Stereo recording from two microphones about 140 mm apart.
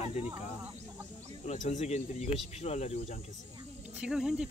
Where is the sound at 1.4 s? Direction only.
60° left (ahead or behind).